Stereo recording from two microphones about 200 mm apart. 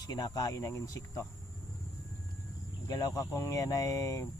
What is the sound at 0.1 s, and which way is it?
Speech, 20° left (ahead or behind).